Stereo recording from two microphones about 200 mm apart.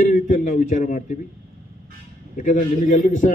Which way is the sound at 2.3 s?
40° left (ahead or behind).